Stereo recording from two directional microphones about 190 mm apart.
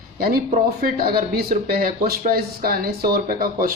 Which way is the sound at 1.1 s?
50° right (ahead or behind).